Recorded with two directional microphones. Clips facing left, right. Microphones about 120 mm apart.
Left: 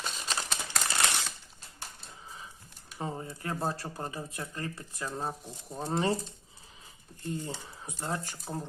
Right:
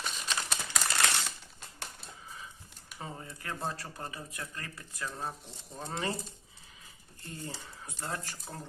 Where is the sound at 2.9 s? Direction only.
30° left (ahead or behind).